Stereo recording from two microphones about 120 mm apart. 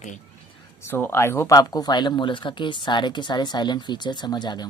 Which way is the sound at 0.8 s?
15° left (ahead or behind).